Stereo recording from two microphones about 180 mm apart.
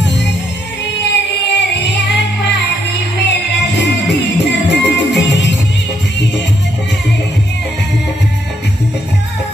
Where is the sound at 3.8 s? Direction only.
75° left (ahead or behind).